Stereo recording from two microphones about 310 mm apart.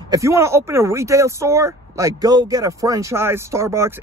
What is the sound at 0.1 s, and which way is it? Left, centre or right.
Speech, centre.